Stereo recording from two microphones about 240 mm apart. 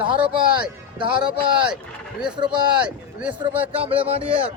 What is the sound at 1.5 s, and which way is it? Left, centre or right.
Speech, centre.